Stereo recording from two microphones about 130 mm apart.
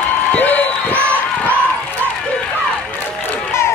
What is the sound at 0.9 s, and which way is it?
Run, 15° right (ahead or behind).